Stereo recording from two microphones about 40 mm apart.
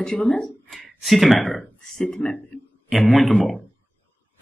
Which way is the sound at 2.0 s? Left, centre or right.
Left.